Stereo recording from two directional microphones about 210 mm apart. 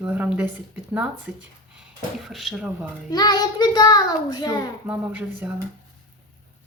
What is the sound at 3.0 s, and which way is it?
A child's voice, 20° left (ahead or behind).